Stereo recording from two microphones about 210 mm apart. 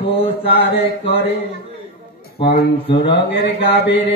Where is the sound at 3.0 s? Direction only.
55° left (ahead or behind).